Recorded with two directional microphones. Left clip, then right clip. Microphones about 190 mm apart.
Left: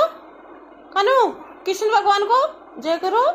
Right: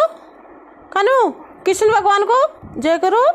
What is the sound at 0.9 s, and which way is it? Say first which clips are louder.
A woman's voice: right 2 dB; 60° right (ahead or behind).